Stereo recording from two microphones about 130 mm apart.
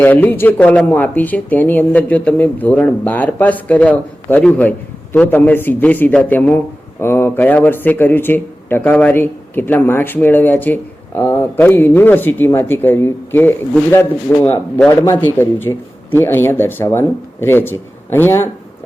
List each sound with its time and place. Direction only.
0.0 s speech: 15° left (ahead or behind)